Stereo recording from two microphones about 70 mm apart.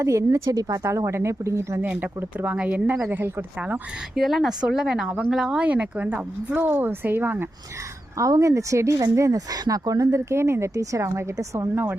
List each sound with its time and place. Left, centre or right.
0.0 s speech: right
1.0 s speech: right
1.9 s speech: right
4.1 s speech: centre
5.5 s speech: centre
8.2 s speech: right
9.5 s speech: right
11.7 s speech: right